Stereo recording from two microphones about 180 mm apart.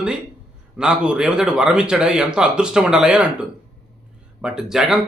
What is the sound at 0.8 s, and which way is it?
A man's voice, 5° right (ahead or behind).